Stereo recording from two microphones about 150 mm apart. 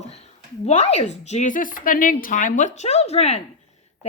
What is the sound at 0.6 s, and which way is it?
A woman's voice, 45° left (ahead or behind).